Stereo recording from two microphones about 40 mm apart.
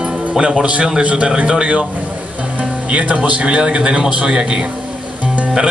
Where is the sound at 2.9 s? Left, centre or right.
Right.